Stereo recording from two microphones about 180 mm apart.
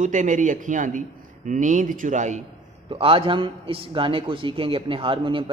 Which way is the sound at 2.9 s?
30° right (ahead or behind).